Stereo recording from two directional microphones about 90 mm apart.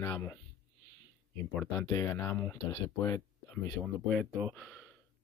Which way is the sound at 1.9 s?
35° left (ahead or behind).